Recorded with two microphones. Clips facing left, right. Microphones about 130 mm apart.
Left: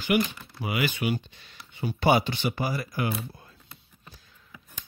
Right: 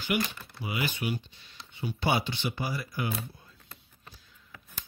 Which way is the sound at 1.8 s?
50° left (ahead or behind).